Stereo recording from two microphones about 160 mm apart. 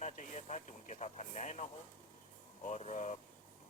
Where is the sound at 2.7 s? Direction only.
45° left (ahead or behind).